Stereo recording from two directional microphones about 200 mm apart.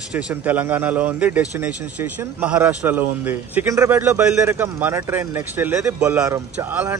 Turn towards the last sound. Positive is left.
turn(degrees=-10)  # may be behind; listen again after turning